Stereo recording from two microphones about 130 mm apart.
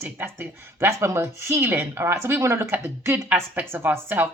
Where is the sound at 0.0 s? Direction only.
15° right (ahead or behind).